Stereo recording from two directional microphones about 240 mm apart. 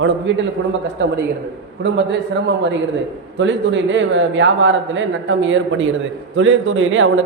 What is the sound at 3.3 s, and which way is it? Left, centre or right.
A man's voice, right.